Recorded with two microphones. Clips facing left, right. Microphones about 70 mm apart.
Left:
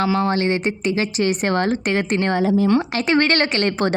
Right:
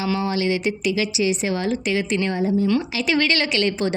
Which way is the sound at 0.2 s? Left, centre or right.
Left.